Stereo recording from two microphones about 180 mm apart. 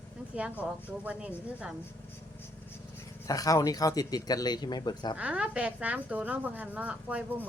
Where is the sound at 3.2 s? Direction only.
20° left (ahead or behind).